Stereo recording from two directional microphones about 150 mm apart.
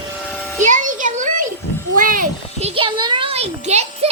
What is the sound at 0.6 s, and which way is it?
Music, 55° right (ahead or behind).